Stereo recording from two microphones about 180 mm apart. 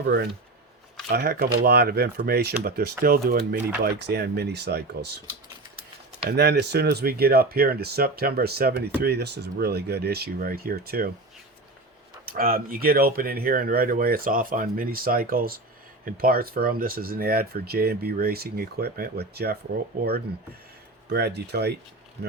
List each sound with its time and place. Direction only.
0.0 s speech: 70° right (ahead or behind)
1.1 s speech: 55° right (ahead or behind)
6.2 s speech: 65° right (ahead or behind)
12.2 s speech: 55° right (ahead or behind)
21.1 s speech: 65° right (ahead or behind)